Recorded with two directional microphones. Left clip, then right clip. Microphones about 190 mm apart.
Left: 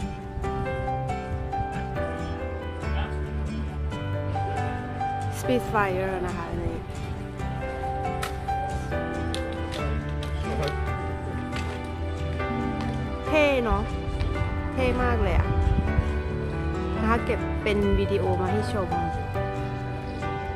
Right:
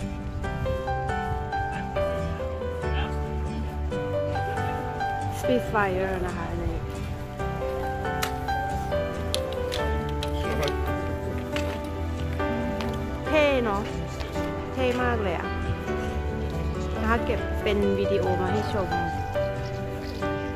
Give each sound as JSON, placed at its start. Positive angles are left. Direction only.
{"t": 5.5, "sound": "speech", "side_deg": 15}
{"t": 13.3, "sound": "music", "side_deg": 15}
{"t": 14.8, "sound": "speech", "side_deg": 15}
{"t": 17.1, "sound": "speech", "side_deg": 20}